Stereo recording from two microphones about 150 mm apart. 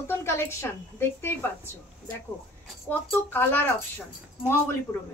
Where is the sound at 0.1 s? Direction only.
15° left (ahead or behind).